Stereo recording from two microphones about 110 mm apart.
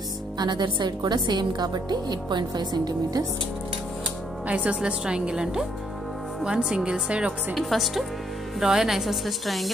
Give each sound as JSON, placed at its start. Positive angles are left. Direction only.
{"t": 0.4, "sound": "a woman's voice", "side_deg": -45}
{"t": 4.5, "sound": "a woman's voice", "side_deg": -10}
{"t": 7.5, "sound": "a woman's voice", "side_deg": 0}